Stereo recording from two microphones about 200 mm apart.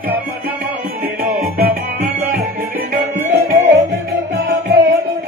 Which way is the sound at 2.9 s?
40° right (ahead or behind).